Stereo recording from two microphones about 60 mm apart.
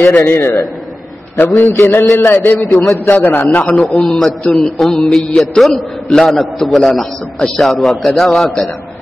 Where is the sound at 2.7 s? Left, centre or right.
Left.